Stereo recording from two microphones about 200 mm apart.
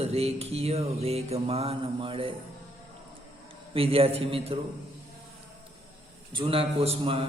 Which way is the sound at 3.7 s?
30° right (ahead or behind).